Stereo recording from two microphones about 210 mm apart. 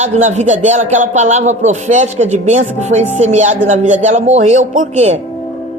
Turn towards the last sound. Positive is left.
turn(degrees=-30)  # may be behind; listen again after turning